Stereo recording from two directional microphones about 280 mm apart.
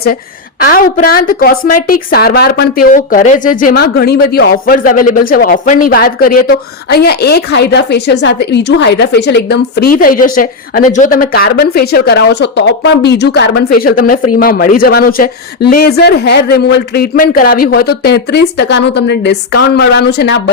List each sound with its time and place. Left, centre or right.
0.7 s speech: left